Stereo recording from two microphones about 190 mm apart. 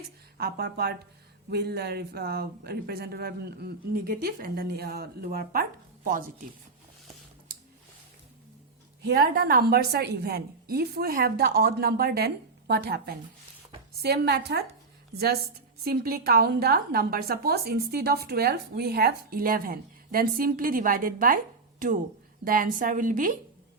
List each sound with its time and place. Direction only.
0.3 s speech: 55° right (ahead or behind)
9.0 s speech: 55° right (ahead or behind)
15.8 s a woman's voice: 55° right (ahead or behind)
22.4 s a woman's voice: 45° right (ahead or behind)